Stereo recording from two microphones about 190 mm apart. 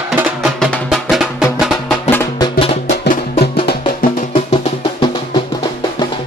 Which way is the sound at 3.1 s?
35° left (ahead or behind).